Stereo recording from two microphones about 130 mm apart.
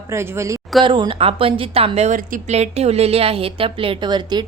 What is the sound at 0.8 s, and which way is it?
A woman's voice, 35° right (ahead or behind).